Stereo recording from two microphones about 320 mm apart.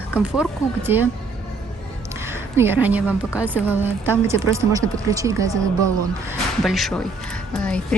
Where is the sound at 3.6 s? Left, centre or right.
Centre.